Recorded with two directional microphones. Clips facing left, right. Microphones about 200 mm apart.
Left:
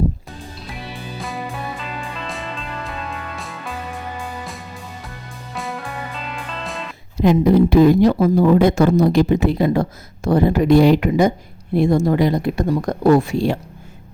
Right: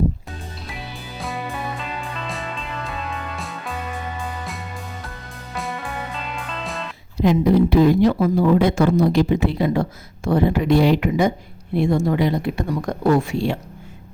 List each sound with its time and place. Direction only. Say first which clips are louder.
0.7 s music: left 4 dB; centre (ahead or behind)
5.5 s music: even; centre (ahead or behind)
7.2 s speech: left 2 dB; 50° left (ahead or behind)